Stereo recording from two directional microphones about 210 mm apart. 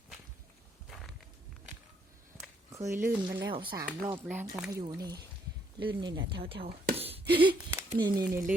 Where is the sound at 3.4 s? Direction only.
25° right (ahead or behind).